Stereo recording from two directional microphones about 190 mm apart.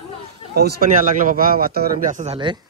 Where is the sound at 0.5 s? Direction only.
55° right (ahead or behind); by 2.6 s 30° right (ahead or behind).